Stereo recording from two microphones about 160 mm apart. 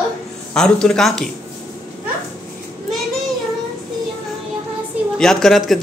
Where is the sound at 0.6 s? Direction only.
5° left (ahead or behind).